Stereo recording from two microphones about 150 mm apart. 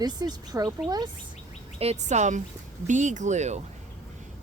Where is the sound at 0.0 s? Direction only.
25° right (ahead or behind).